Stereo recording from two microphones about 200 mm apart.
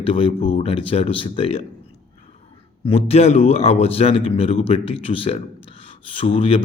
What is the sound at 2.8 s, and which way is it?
A man's voice, 30° left (ahead or behind).